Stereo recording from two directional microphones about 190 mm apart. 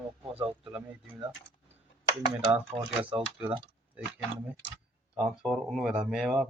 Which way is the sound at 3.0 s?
5° right (ahead or behind).